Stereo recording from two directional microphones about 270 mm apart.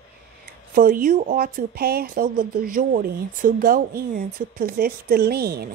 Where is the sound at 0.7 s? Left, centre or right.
Right.